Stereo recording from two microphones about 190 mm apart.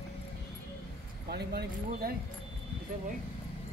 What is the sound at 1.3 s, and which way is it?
Speech, 55° right (ahead or behind).